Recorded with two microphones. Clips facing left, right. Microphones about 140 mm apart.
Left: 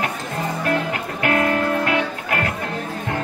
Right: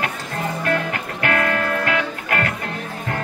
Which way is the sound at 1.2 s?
25° left (ahead or behind).